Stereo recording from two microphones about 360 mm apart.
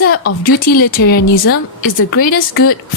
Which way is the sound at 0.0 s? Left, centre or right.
Left.